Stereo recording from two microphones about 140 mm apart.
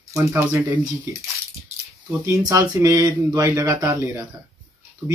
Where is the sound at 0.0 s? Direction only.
20° right (ahead or behind).